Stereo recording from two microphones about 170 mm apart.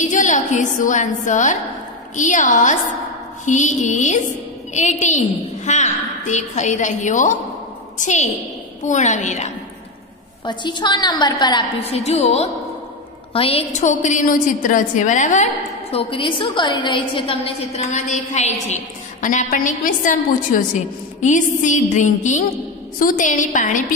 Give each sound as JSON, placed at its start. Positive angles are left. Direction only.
{"t": 0.0, "sound": "a woman's voice", "side_deg": 45}
{"t": 10.4, "sound": "a woman's voice", "side_deg": 25}